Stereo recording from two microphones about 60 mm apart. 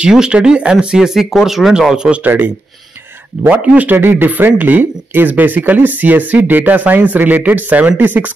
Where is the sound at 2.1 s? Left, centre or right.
Right.